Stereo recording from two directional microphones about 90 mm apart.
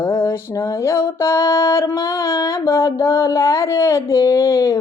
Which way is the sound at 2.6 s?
30° left (ahead or behind).